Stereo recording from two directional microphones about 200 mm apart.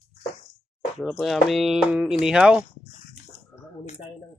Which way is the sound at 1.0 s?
Centre (ahead or behind).